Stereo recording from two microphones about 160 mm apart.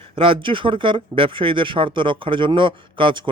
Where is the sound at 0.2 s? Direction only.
35° right (ahead or behind).